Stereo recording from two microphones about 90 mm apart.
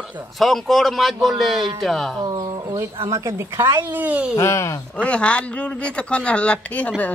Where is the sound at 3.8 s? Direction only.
20° right (ahead or behind).